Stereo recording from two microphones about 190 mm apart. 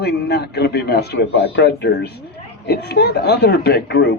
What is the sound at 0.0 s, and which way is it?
Speech, 60° left (ahead or behind).